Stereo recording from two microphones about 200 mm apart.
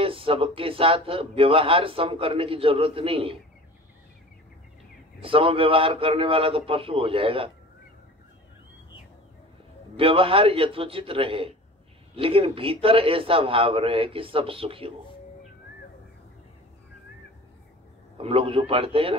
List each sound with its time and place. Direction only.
0.0 s speech: 25° right (ahead or behind)
5.2 s speech: 25° right (ahead or behind)
9.9 s speech: 25° right (ahead or behind)
18.1 s speech: 25° right (ahead or behind)